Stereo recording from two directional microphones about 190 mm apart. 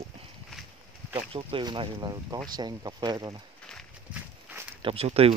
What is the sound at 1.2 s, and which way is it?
Speech, 25° right (ahead or behind).